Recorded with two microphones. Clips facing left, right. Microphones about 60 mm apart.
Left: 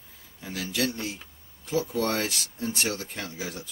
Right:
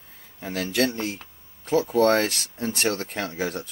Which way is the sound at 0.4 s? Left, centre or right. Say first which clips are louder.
Right 5 dB; right.